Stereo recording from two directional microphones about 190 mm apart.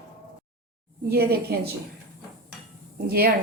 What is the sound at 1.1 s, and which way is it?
Speech, 55° right (ahead or behind).